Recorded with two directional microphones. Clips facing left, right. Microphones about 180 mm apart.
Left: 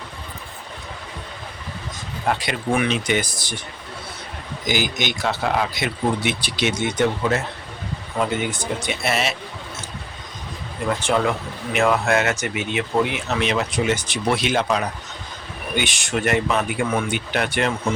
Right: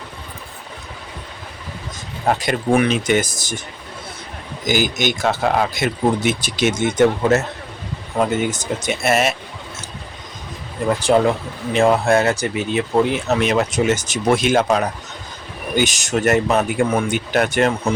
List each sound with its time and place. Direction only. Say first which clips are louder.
2.2 s speech: right 4 dB; 45° right (ahead or behind)
4.6 s speech: right 4 dB; 45° right (ahead or behind)
8.4 s speech: right 3 dB; 45° right (ahead or behind)
11.0 s speech: right 6 dB; 35° right (ahead or behind)